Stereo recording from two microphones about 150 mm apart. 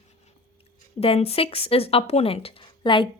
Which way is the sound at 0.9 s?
40° left (ahead or behind).